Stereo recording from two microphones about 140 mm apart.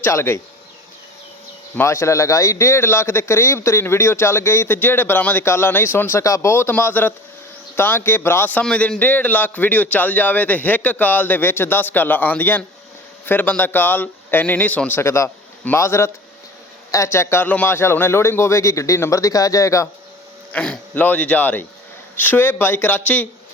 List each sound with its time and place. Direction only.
0.0 s a man's voice: 20° left (ahead or behind)
1.7 s a man's voice: 20° left (ahead or behind)
20.5 s a man's voice: 5° left (ahead or behind)